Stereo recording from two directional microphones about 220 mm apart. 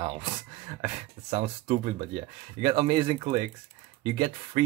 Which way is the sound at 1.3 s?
35° right (ahead or behind).